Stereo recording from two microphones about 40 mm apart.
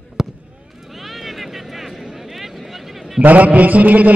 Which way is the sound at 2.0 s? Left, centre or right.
Centre.